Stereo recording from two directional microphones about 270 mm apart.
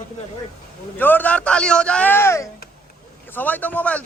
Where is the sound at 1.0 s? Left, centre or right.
Centre.